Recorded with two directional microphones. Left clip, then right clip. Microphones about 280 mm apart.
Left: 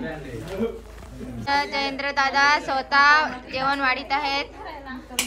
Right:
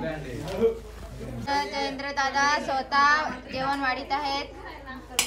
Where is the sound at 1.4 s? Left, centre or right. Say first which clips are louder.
Left 4 dB; centre.